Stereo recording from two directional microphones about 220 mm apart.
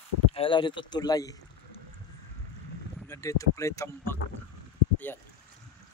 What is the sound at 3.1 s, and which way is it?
Speech, 15° left (ahead or behind).